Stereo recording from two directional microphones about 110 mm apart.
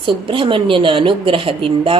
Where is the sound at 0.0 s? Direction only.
50° right (ahead or behind).